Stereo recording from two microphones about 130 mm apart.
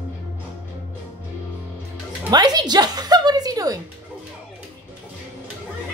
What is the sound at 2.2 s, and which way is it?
A woman's voice, 30° right (ahead or behind).